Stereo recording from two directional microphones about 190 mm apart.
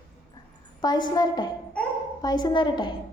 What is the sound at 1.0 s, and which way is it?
Speech, 20° left (ahead or behind).